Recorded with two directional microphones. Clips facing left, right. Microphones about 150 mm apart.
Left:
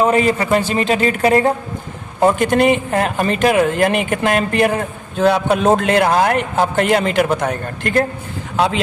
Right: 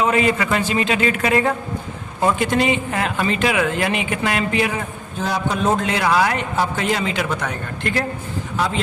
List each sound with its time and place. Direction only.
0.0 s a man's voice: 40° left (ahead or behind)
2.4 s speech: 55° left (ahead or behind)
8.5 s a man's voice: 70° left (ahead or behind)